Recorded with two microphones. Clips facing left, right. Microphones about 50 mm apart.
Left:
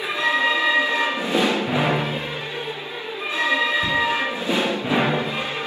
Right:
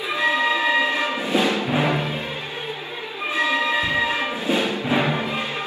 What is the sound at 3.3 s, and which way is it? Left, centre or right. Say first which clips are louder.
Music: even; right.